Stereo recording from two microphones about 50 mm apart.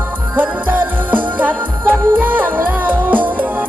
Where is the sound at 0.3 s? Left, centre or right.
Right.